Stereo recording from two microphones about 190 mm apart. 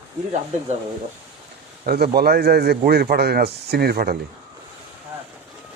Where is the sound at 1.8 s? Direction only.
55° right (ahead or behind).